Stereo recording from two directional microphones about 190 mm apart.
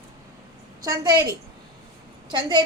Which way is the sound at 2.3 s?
25° right (ahead or behind).